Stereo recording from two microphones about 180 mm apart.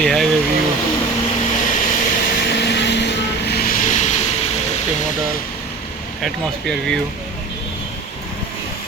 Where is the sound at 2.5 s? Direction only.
70° left (ahead or behind); by 4.2 s 40° left (ahead or behind).